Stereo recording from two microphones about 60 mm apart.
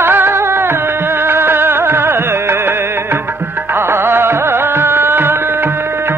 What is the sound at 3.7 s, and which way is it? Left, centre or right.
Music, right.